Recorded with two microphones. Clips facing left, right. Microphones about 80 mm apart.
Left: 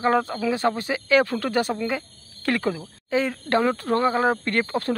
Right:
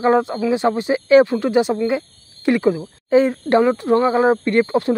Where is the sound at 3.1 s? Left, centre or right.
Right.